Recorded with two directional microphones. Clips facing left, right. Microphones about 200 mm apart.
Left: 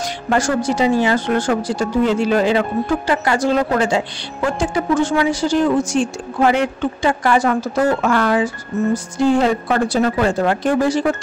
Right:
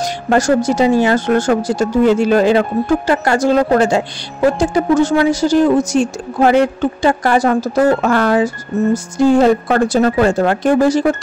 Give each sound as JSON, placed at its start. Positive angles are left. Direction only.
{"t": 0.0, "sound": "speech", "side_deg": -40}